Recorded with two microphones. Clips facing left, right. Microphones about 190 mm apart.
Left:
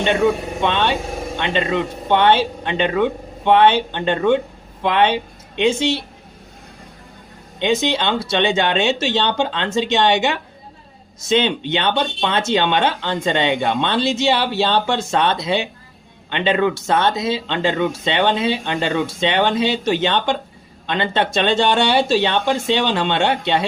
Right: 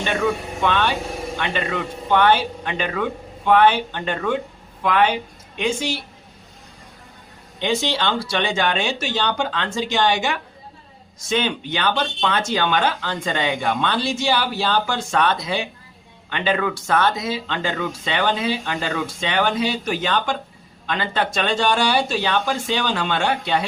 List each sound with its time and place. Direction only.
0.0 s speech: 25° left (ahead or behind)
7.6 s speech: 20° left (ahead or behind)